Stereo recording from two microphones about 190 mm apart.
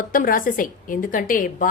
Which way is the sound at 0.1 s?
45° left (ahead or behind).